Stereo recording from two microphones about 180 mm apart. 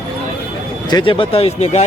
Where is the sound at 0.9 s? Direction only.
25° left (ahead or behind).